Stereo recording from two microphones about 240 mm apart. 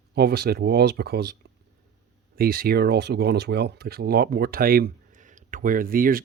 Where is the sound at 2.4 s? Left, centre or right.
Right.